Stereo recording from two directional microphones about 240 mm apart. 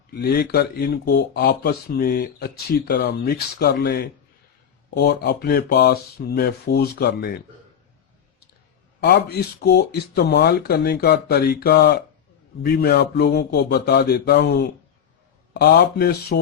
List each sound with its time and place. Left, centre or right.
0.1 s speech: left
9.0 s speech: left